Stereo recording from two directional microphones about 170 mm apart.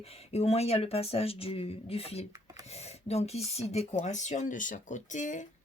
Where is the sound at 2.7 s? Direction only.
40° left (ahead or behind).